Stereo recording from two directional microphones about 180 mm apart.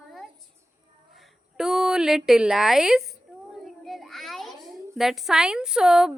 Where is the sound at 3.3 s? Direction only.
5° right (ahead or behind).